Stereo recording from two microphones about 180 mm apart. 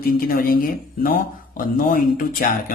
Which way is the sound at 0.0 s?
55° left (ahead or behind).